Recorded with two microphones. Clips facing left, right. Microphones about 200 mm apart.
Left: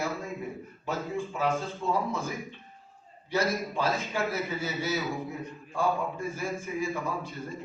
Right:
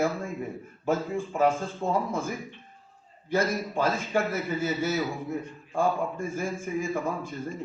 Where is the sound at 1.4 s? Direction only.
50° right (ahead or behind).